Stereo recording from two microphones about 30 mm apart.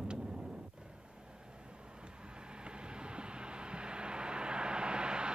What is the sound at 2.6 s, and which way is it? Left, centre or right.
Vehicle, right.